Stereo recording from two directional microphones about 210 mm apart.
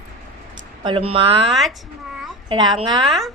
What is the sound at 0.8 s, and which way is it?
Speech, 25° right (ahead or behind).